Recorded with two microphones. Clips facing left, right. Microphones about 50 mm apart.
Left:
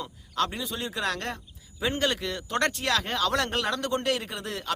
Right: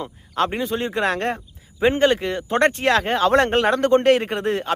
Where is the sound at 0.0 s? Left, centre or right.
Right.